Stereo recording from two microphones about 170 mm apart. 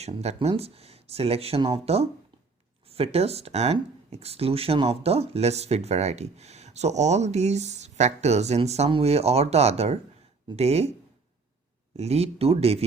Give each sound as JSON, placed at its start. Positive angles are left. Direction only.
{"t": 0.0, "sound": "speech", "side_deg": -40}
{"t": 11.9, "sound": "speech", "side_deg": -40}